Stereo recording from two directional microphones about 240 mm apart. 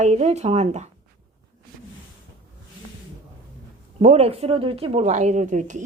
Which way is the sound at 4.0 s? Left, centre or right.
Right.